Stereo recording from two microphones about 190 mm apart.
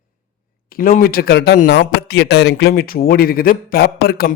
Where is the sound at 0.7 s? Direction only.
50° left (ahead or behind).